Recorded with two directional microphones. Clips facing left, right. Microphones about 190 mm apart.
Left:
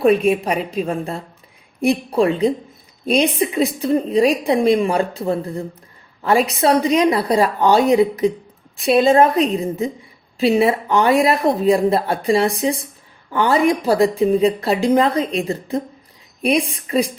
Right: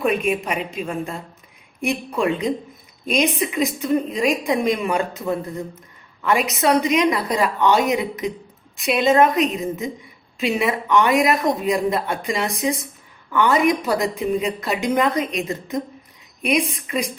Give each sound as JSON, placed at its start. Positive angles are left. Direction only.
{"t": 0.0, "sound": "a woman's voice", "side_deg": 35}